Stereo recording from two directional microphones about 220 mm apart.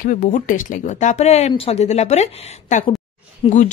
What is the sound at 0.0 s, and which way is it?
Speech, 35° left (ahead or behind).